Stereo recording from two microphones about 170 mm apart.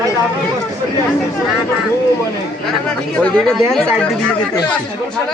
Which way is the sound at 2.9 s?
5° left (ahead or behind).